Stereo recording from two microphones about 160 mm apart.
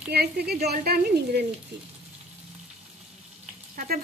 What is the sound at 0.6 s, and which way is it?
Speech, 75° right (ahead or behind).